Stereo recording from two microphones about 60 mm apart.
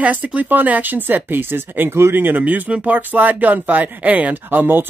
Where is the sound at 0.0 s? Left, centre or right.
Right.